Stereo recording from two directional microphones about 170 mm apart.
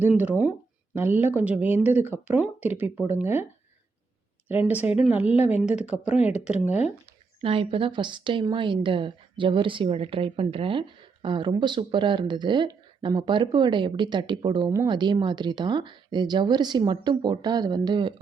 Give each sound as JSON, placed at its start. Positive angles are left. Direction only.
{"t": 0.0, "sound": "speech", "side_deg": -10}
{"t": 4.4, "sound": "speech", "side_deg": -10}
{"t": 6.4, "sound": "speech", "side_deg": 40}
{"t": 7.4, "sound": "a woman's voice", "side_deg": -30}